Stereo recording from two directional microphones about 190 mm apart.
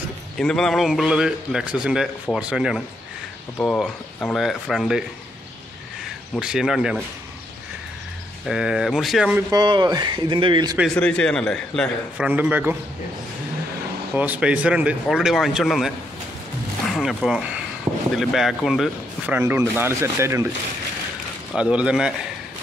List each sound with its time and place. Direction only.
0.4 s speech: centre (ahead or behind)
6.3 s speech: 5° right (ahead or behind)
8.5 s speech: 5° right (ahead or behind)
9.5 s speech: 25° right (ahead or behind)
11.0 s speech: 5° left (ahead or behind)
12.3 s speech: 10° right (ahead or behind)
14.1 s speech: 10° right (ahead or behind)
16.9 s speech: centre (ahead or behind)
21.5 s speech: 5° right (ahead or behind)